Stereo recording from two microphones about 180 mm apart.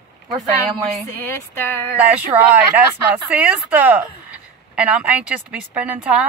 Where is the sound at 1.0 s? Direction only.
10° left (ahead or behind).